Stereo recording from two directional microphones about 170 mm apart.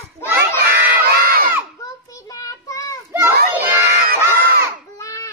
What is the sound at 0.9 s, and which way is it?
Crowd, 60° right (ahead or behind).